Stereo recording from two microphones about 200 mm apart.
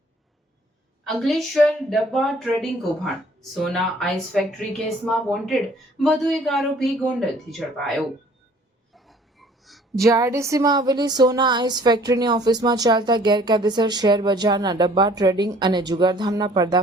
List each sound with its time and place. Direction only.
1.0 s a woman's voice: centre (ahead or behind)
9.0 s a sound: centre (ahead or behind)
10.0 s speech: 15° right (ahead or behind)